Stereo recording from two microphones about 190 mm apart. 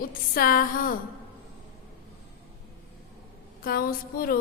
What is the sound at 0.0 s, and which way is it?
Music, 50° left (ahead or behind).